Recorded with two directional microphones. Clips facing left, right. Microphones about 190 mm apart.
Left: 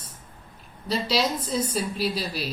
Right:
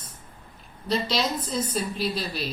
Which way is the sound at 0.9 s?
10° left (ahead or behind).